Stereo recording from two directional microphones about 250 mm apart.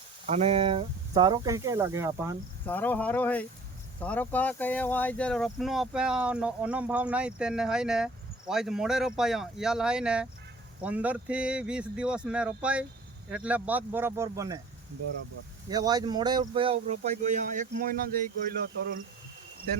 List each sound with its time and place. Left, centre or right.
0.3 s speech: right
2.6 s speech: centre
15.7 s speech: centre; by 17.9 s right